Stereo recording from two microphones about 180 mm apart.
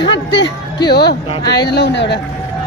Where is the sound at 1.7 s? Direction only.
70° left (ahead or behind).